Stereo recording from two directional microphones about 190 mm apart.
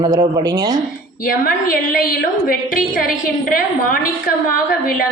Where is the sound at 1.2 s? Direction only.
50° left (ahead or behind).